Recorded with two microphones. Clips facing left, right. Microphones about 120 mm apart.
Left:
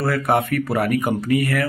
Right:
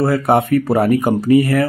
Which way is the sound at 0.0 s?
25° right (ahead or behind).